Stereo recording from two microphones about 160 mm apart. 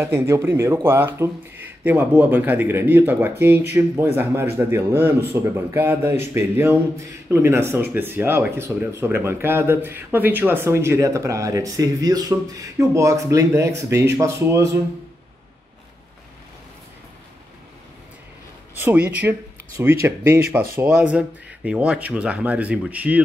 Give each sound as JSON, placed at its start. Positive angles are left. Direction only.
{"t": 0.0, "sound": "speech", "side_deg": -15}
{"t": 18.8, "sound": "speech", "side_deg": -10}